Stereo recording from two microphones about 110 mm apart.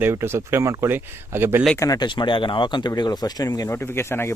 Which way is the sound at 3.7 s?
20° left (ahead or behind).